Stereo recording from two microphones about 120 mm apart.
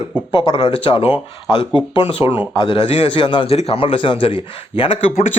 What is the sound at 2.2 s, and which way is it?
Speech, 20° right (ahead or behind).